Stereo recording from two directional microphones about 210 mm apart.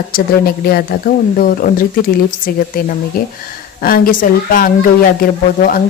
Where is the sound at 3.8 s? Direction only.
45° left (ahead or behind).